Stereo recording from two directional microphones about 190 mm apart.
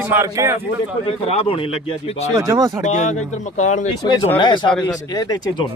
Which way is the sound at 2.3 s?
15° right (ahead or behind).